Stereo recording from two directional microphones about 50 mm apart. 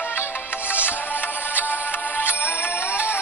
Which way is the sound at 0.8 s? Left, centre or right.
Left.